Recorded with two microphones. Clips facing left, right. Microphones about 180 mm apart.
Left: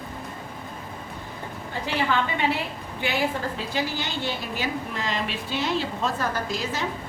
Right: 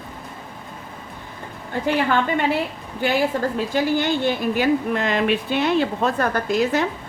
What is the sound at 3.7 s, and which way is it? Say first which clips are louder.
A woman's voice: right 10 dB; 50° right (ahead or behind).